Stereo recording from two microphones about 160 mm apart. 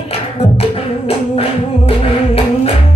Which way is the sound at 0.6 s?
35° left (ahead or behind).